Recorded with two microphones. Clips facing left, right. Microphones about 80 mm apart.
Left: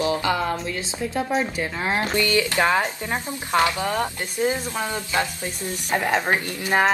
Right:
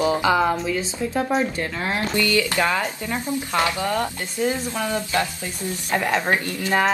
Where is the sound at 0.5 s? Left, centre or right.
Centre.